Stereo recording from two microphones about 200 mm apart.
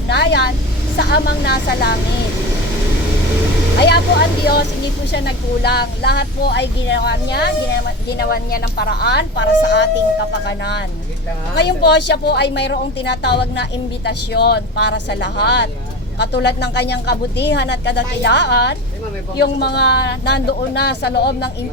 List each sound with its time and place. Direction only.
0.1 s vehicle: 55° left (ahead or behind)
0.9 s a woman's voice: 55° left (ahead or behind)
3.8 s a woman's voice: 55° left (ahead or behind)
5.1 s a woman's voice: 55° left (ahead or behind)